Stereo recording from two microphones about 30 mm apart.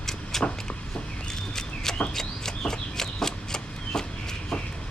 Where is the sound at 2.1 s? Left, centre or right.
Centre.